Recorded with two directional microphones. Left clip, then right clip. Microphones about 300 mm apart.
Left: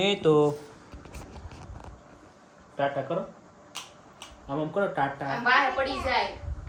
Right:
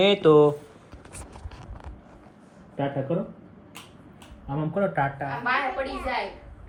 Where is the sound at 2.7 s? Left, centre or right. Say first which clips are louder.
Even; right.